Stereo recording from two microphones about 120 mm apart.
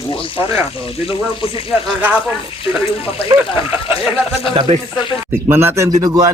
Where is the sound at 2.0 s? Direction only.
15° right (ahead or behind).